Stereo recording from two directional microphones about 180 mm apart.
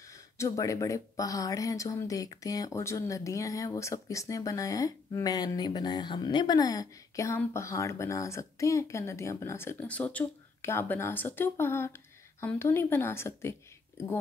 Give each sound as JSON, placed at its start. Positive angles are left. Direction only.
{"t": 0.4, "sound": "speech", "side_deg": 20}